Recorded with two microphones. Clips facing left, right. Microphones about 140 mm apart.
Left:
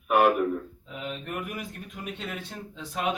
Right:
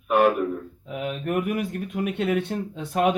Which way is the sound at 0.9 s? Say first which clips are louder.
Right 9 dB; 55° right (ahead or behind).